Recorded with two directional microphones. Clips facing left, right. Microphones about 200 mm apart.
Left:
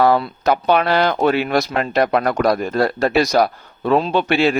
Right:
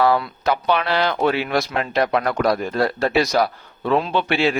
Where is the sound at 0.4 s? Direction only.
50° left (ahead or behind).